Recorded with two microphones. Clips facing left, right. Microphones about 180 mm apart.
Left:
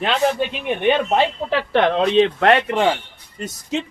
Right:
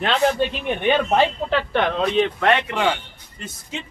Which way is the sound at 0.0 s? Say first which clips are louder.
Even; 5° left (ahead or behind).